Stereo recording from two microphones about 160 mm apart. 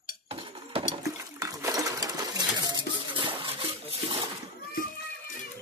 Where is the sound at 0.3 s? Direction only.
35° right (ahead or behind).